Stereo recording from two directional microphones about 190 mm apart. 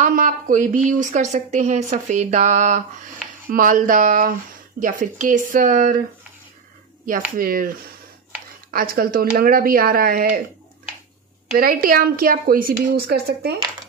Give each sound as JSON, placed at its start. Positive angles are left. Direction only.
{"t": 0.0, "sound": "a woman's voice", "side_deg": -40}
{"t": 7.3, "sound": "a woman's voice", "side_deg": -50}
{"t": 11.5, "sound": "a woman's voice", "side_deg": -50}